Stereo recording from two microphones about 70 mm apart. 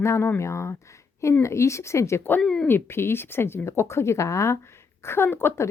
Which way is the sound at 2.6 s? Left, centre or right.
Left.